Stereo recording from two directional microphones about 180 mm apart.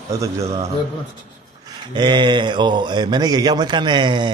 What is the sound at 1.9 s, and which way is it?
Speech, 25° right (ahead or behind).